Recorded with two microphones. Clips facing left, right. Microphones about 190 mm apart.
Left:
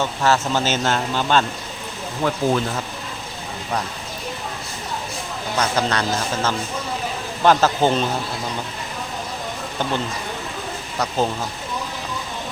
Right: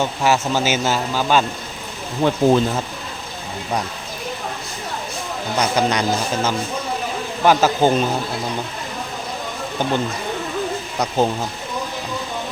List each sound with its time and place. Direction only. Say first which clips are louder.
0.0 s speech: right 1 dB; 10° right (ahead or behind)
2.2 s speech: right 5 dB; 25° right (ahead or behind)
5.5 s speech: right 2 dB; 15° right (ahead or behind)